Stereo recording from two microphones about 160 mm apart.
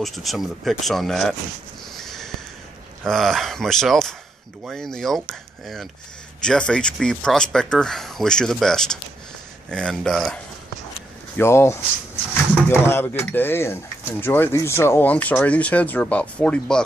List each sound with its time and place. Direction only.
0.0 s speech: centre (ahead or behind)
2.0 s a sound: centre (ahead or behind)
3.1 s speech: centre (ahead or behind)
6.4 s speech: 5° left (ahead or behind)
11.3 s speech: 15° left (ahead or behind)